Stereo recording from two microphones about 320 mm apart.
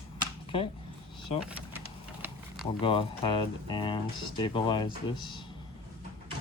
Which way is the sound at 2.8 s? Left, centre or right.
Centre.